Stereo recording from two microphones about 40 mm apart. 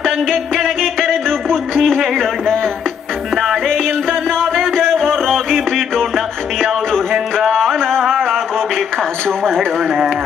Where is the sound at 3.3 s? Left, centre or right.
Centre.